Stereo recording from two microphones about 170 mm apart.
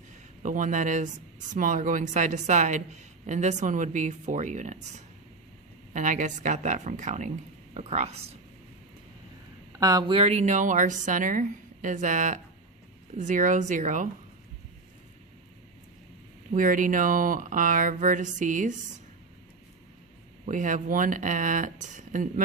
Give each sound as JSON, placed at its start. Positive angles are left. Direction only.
{"t": 0.4, "sound": "a woman's voice", "side_deg": -50}
{"t": 9.7, "sound": "a woman's voice", "side_deg": -20}
{"t": 16.5, "sound": "a woman's voice", "side_deg": -50}
{"t": 20.4, "sound": "a woman's voice", "side_deg": -50}